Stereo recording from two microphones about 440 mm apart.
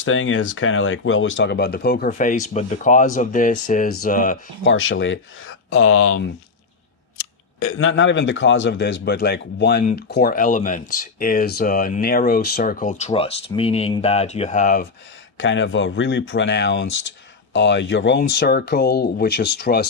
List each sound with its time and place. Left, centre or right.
0.0 s a man's voice: left
7.6 s a man's voice: left